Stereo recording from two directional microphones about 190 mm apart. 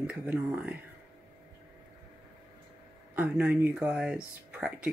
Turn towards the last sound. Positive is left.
turn(degrees=-5)  # may be behind; listen again after turning